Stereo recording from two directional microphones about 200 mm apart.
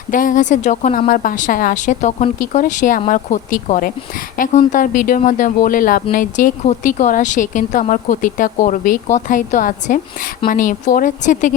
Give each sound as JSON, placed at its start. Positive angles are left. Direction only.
{"t": 0.1, "sound": "a woman's voice", "side_deg": 40}